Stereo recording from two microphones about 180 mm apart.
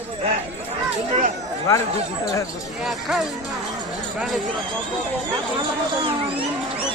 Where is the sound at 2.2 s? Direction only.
20° left (ahead or behind).